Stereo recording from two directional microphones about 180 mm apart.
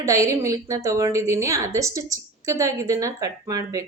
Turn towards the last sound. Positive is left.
turn(degrees=-20)  # may be behind; listen again after turning